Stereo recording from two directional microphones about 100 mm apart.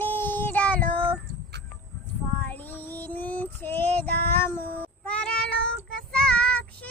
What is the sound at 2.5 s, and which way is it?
Child singing, 20° left (ahead or behind).